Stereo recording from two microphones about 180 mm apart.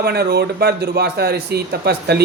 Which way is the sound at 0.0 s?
65° right (ahead or behind).